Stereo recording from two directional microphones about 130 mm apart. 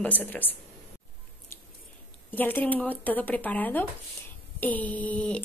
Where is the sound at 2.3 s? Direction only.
15° left (ahead or behind).